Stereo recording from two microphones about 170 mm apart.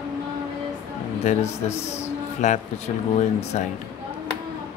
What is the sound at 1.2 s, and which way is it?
A man's voice, 40° left (ahead or behind).